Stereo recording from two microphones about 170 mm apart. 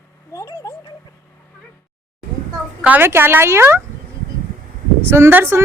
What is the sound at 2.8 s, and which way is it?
Speech, 10° right (ahead or behind).